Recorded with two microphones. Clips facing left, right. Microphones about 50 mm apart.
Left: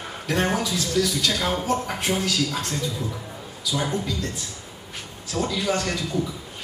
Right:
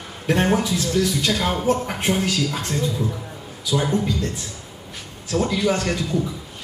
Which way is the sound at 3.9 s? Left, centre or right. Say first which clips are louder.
Right 5 dB; right.